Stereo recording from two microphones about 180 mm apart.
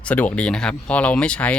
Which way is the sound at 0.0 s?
10° left (ahead or behind).